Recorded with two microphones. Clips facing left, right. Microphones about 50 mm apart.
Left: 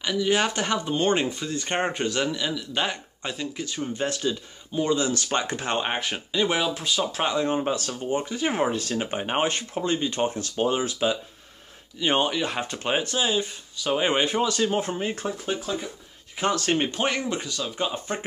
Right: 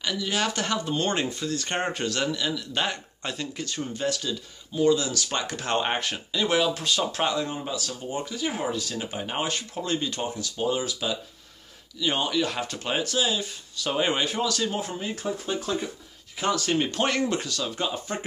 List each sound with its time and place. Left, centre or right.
0.0 s speech: centre
3.9 s speech: left
5.4 s speech: left
5.8 s speech: centre
7.3 s speech: left
10.1 s speech: left
15.6 s speech: centre
16.4 s speech: left